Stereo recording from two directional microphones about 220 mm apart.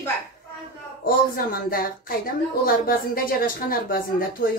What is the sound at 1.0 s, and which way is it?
A woman's voice, 40° left (ahead or behind).